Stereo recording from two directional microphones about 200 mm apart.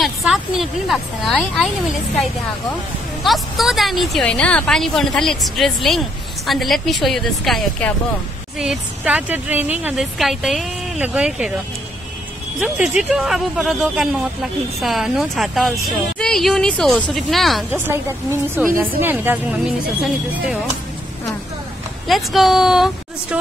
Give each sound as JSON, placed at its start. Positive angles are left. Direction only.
{"t": 0.0, "sound": "a woman's voice", "side_deg": 0}
{"t": 3.3, "sound": "a woman's voice", "side_deg": 0}
{"t": 12.5, "sound": "a woman's voice", "side_deg": -5}
{"t": 17.6, "sound": "a woman's voice", "side_deg": -10}
{"t": 22.0, "sound": "a woman's voice", "side_deg": 0}